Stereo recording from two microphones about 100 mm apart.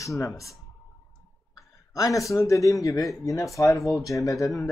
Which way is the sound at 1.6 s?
35° left (ahead or behind).